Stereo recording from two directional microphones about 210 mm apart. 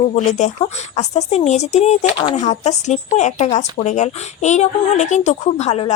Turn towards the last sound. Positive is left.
turn(degrees=30)  # may be behind; listen again after turning